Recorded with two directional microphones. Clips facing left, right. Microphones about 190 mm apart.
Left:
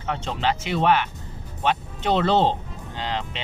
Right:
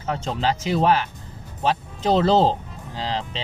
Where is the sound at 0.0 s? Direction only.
35° right (ahead or behind).